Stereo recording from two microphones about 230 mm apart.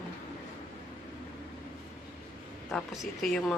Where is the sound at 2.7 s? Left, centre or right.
Centre.